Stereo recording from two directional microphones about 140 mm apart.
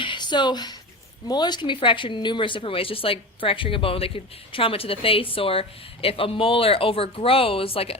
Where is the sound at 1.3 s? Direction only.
30° left (ahead or behind).